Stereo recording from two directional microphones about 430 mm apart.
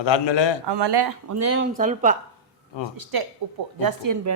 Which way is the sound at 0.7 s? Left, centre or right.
Right.